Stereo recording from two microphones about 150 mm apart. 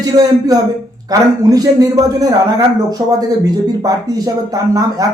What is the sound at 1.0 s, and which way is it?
Speech, 25° right (ahead or behind).